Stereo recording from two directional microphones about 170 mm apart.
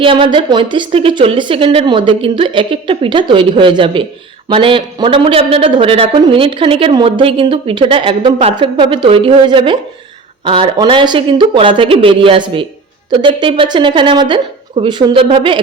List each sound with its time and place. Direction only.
0.0 s a woman's voice: 30° right (ahead or behind)